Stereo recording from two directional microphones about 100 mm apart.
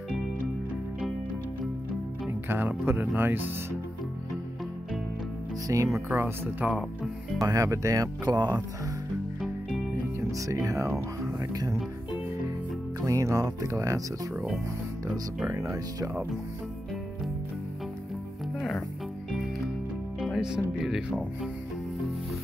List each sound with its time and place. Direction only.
2.5 s speech: 20° right (ahead or behind)
5.7 s speech: 35° right (ahead or behind)
6.6 s speech: 15° right (ahead or behind)
7.3 s speech: 35° right (ahead or behind)
9.4 s music: 5° left (ahead or behind)
10.3 s speech: 30° right (ahead or behind)
13.0 s speech: 30° right (ahead or behind)
15.7 s speech: 30° right (ahead or behind)
20.2 s speech: 5° right (ahead or behind)